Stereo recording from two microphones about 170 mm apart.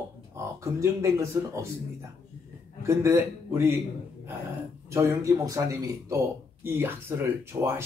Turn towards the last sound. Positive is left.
turn(degrees=-15)  # may be behind; listen again after turning